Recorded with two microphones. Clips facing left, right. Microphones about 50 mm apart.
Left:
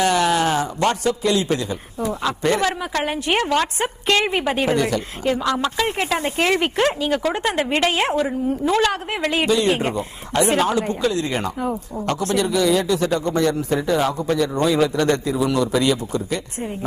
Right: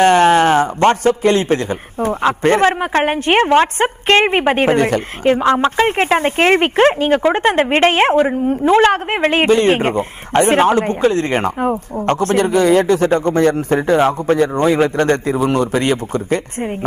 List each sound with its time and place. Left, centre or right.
0.0 s a man's voice: right